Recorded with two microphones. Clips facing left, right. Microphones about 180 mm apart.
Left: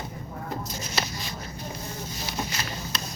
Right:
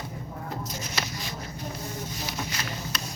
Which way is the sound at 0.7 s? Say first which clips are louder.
Left 2 dB; 30° left (ahead or behind).